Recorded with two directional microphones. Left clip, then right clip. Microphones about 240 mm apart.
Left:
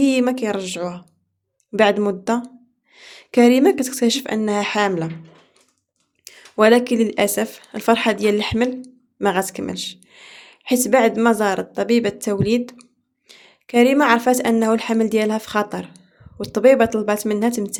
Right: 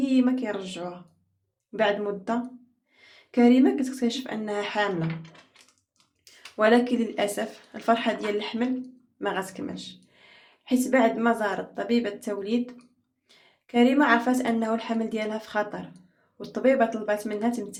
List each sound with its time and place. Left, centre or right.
0.0 s a woman's voice: left
6.2 s a woman's voice: left